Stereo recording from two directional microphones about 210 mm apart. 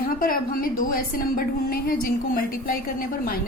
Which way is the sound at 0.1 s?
40° left (ahead or behind).